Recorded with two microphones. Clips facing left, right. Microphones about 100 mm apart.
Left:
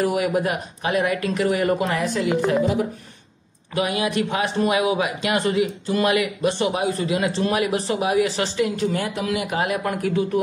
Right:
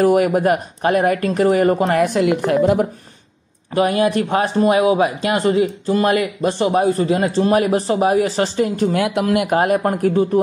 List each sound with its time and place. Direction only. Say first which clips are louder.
0.0 s speech: right 7 dB; 45° right (ahead or behind)
3.7 s speech: right 6 dB; 40° right (ahead or behind)
8.9 s speech: right 7 dB; 65° right (ahead or behind)
9.2 s speech: right 8 dB; 50° right (ahead or behind)